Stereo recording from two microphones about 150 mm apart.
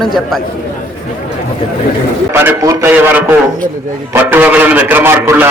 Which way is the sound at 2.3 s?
15° right (ahead or behind).